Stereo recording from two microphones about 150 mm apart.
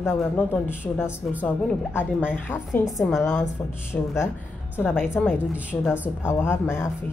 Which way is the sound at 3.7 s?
15° left (ahead or behind).